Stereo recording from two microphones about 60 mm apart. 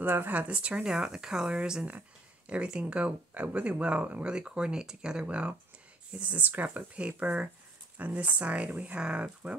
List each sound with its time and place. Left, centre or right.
0.0 s speech: right